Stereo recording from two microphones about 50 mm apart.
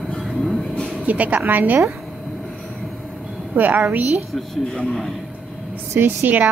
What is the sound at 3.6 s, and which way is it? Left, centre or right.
Speech, right.